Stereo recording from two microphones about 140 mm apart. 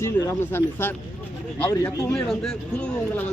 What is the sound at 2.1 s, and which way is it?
Speech, 5° left (ahead or behind).